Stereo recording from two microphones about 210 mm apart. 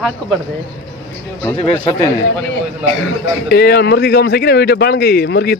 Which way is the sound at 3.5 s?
50° left (ahead or behind).